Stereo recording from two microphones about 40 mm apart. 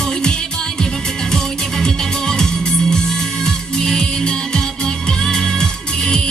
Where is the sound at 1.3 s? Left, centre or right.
Centre.